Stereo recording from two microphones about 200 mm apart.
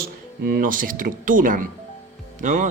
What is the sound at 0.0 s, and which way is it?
A man's voice, 45° right (ahead or behind).